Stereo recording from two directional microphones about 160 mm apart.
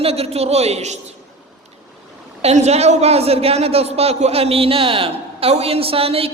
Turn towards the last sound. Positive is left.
turn(degrees=-35)  # may be behind; listen again after turning